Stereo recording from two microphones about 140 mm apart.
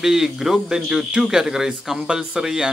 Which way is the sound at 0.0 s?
5° right (ahead or behind).